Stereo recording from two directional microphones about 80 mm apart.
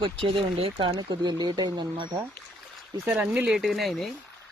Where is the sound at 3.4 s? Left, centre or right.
Centre.